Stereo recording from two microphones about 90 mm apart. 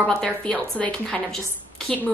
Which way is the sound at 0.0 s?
10° left (ahead or behind).